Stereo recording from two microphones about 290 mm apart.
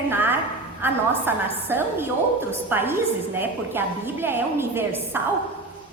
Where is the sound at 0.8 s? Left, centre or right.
Centre.